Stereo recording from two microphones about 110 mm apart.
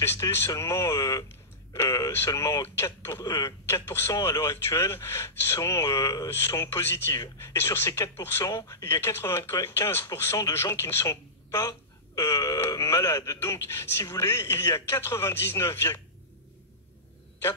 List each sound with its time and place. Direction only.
0.0 s speech: 25° left (ahead or behind)